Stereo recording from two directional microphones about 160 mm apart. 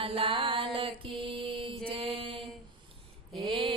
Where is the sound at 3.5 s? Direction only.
35° right (ahead or behind).